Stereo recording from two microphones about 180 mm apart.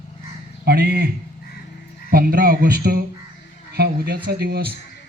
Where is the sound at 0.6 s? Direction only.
60° right (ahead or behind).